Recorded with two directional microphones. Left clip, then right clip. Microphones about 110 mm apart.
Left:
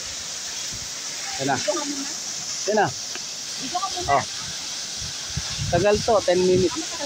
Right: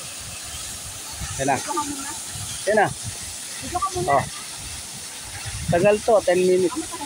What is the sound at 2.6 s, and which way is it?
Speech, 5° right (ahead or behind).